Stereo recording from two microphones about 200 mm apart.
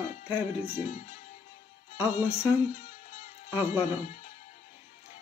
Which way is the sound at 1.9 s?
10° right (ahead or behind).